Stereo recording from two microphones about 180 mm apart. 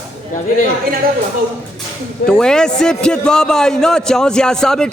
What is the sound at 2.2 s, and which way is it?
A man's voice, 5° left (ahead or behind).